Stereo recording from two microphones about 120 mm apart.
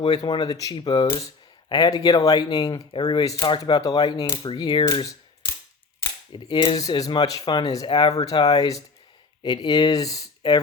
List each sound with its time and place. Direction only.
0.0 s speech: 40° left (ahead or behind)
6.3 s speech: 40° left (ahead or behind)